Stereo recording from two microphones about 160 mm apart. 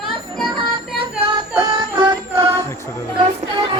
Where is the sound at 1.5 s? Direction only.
30° right (ahead or behind).